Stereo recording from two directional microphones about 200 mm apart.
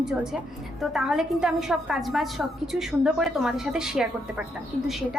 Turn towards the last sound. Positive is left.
turn(degrees=0)  # may be behind; listen again after turning